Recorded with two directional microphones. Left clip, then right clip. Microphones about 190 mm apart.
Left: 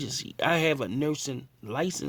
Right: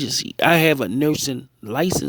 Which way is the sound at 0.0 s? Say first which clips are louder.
Right 10 dB; 30° right (ahead or behind).